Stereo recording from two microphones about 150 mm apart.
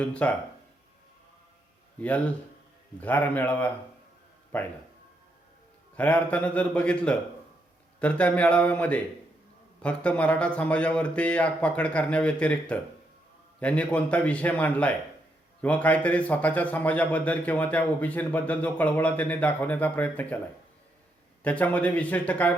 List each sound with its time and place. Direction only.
0.0 s speech: 10° left (ahead or behind)
2.0 s speech: 10° left (ahead or behind)
6.0 s speech: 10° left (ahead or behind)
21.4 s speech: 10° left (ahead or behind)